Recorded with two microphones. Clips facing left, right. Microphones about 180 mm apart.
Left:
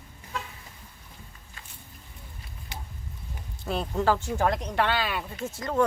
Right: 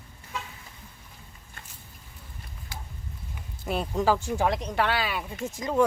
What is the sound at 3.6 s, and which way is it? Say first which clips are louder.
Speech: even; 10° right (ahead or behind).